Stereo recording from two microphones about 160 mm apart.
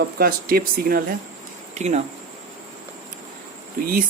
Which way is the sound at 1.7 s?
45° right (ahead or behind).